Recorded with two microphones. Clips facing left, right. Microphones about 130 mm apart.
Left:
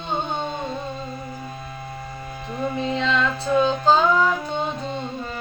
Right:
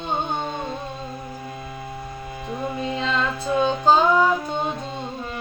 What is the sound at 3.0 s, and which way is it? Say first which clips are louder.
Music: left 2 dB; 30° right (ahead or behind).